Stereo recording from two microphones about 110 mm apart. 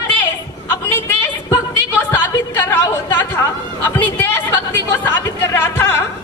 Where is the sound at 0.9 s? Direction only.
20° left (ahead or behind).